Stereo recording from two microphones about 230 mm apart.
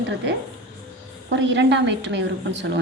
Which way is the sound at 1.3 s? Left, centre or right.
Right.